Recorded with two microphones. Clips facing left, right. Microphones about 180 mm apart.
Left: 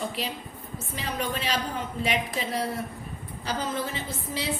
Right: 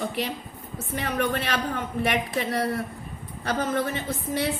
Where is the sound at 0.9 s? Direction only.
60° right (ahead or behind).